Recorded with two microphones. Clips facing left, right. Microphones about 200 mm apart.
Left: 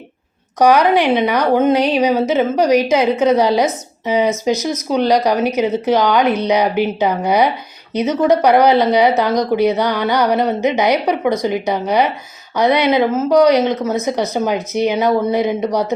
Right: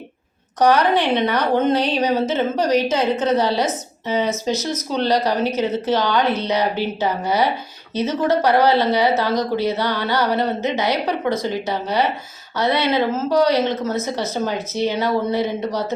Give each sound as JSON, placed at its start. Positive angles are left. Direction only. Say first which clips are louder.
{"t": 0.6, "sound": "a woman's voice", "louder": "left 4 dB", "side_deg": 10}